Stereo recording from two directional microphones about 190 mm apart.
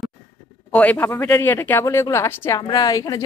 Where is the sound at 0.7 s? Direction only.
10° left (ahead or behind).